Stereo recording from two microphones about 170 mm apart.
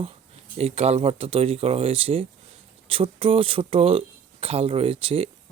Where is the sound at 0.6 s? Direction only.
35° right (ahead or behind).